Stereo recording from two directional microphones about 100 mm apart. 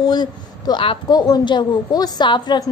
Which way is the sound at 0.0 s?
45° left (ahead or behind).